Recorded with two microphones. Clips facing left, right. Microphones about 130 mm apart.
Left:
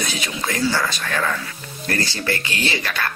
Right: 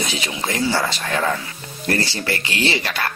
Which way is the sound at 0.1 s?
25° right (ahead or behind).